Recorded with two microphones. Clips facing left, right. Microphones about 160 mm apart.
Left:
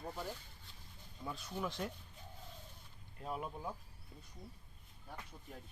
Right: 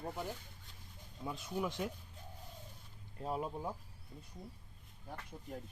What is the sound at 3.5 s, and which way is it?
Speech, 20° right (ahead or behind).